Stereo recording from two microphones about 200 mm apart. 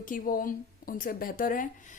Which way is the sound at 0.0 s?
45° left (ahead or behind).